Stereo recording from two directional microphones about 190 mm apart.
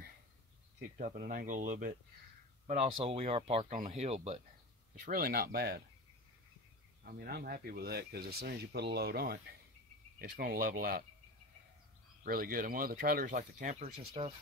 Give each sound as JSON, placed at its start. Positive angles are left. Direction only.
{"t": 0.7, "sound": "speech", "side_deg": -50}
{"t": 5.0, "sound": "speech", "side_deg": -50}
{"t": 7.1, "sound": "speech", "side_deg": -55}
{"t": 12.2, "sound": "speech", "side_deg": -50}